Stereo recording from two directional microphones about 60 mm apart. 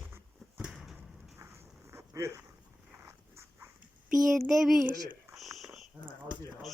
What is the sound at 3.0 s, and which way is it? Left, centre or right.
Dog, right.